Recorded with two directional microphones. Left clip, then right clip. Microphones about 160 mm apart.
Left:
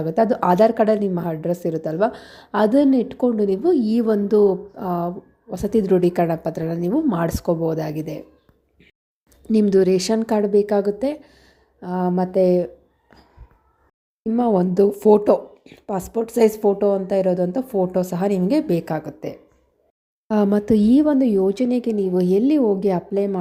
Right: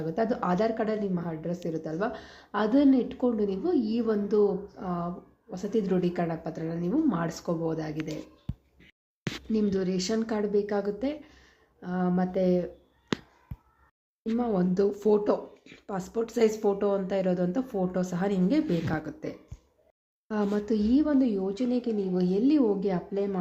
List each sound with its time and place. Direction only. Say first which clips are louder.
0.0 s a woman's voice: left 10 dB; 50° left (ahead or behind)
9.5 s a woman's voice: left 13 dB; 50° left (ahead or behind)
14.3 s a woman's voice: left 10 dB; 45° left (ahead or behind)
20.2 s a woman's voice: left 10 dB; 45° left (ahead or behind)